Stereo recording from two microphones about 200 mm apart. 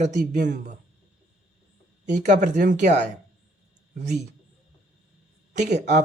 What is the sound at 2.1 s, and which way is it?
Speech, 35° right (ahead or behind).